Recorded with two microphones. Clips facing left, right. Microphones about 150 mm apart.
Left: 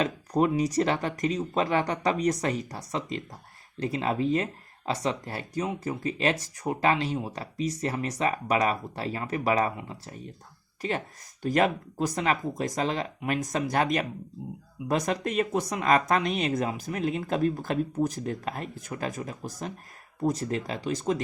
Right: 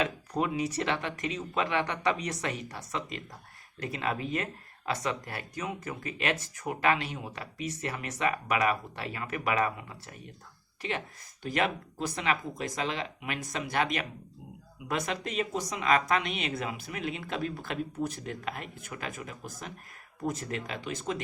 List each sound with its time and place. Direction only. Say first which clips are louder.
0.0 s speech: left 5 dB; 40° left (ahead or behind)
10.8 s speech: left 4 dB; 40° left (ahead or behind)